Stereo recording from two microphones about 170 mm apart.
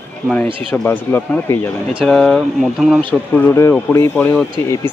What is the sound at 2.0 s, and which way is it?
Speech, centre (ahead or behind).